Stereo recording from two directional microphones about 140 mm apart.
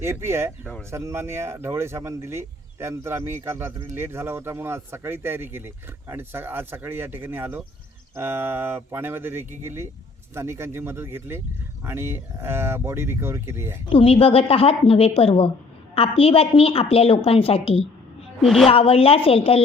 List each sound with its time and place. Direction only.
0.0 s speech: 20° right (ahead or behind)
0.6 s speech: 10° left (ahead or behind)
0.9 s speech: 20° right (ahead or behind)
13.9 s a woman's voice: 45° left (ahead or behind)
18.4 s a woman's voice: centre (ahead or behind)
18.7 s a woman's voice: 45° left (ahead or behind)